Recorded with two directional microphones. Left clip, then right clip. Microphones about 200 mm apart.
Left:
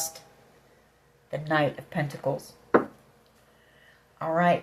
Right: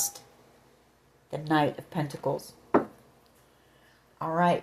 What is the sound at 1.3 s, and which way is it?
Speech, 45° right (ahead or behind).